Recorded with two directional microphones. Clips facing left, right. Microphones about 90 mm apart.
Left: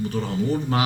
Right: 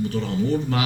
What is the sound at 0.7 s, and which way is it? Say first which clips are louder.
Speech: left 2 dB; 35° left (ahead or behind).